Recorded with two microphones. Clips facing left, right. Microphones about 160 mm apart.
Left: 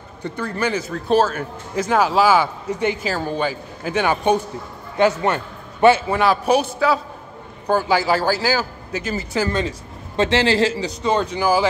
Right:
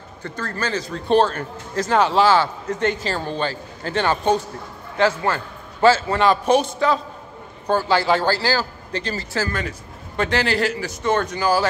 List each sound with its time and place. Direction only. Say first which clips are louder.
0.2 s a man's voice: left 4 dB; 15° left (ahead or behind)
6.0 s a man's voice: even; 5° left (ahead or behind); by 10.9 s 25° left (ahead or behind)
11.0 s speech: even; 15° left (ahead or behind)